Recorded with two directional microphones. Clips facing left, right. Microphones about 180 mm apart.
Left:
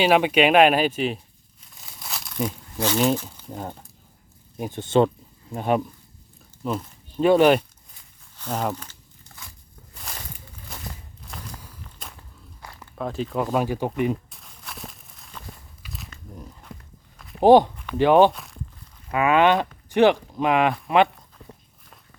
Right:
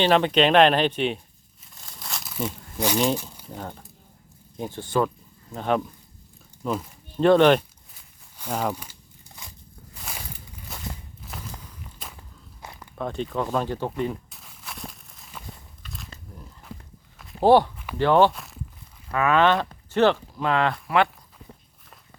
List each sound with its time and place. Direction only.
0.0 s speech: 10° left (ahead or behind)
1.7 s crumpling: centre (ahead or behind)
2.7 s speech: 15° right (ahead or behind)
3.5 s speech: 10° left (ahead or behind)
4.8 s a sound: 25° left (ahead or behind)
5.5 s speech: 10° left (ahead or behind)
8.4 s speech: 10° right (ahead or behind)
8.7 s biting: 10° right (ahead or behind)
10.0 s walk: 5° right (ahead or behind)
12.8 s speech: centre (ahead or behind)
14.3 s walk: centre (ahead or behind)
17.4 s speech: 15° left (ahead or behind)
18.3 s speech: centre (ahead or behind)
19.1 s speech: 15° left (ahead or behind)